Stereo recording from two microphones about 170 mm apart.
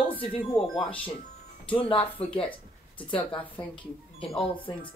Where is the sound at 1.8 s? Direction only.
35° left (ahead or behind).